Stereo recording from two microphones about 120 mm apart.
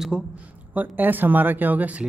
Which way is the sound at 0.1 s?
5° right (ahead or behind).